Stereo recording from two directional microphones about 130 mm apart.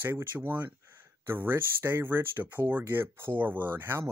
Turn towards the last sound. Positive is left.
turn(degrees=-20)  # may be behind; listen again after turning